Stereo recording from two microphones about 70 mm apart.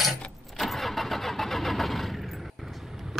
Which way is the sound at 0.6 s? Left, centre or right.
Centre.